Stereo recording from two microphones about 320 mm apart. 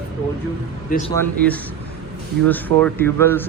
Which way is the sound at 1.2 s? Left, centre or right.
Centre.